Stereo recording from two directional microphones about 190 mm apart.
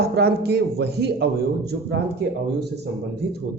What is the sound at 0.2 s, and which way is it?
A man's voice, 55° right (ahead or behind).